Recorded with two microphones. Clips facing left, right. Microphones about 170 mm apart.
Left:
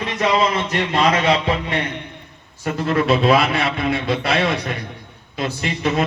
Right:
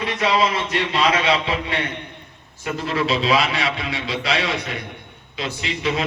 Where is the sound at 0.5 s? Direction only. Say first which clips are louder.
Left 2 dB; 45° left (ahead or behind).